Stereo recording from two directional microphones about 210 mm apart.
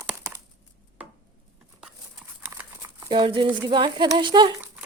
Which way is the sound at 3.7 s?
20° right (ahead or behind).